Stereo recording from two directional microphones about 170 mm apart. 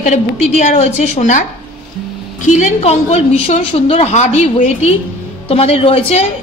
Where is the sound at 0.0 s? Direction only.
40° left (ahead or behind).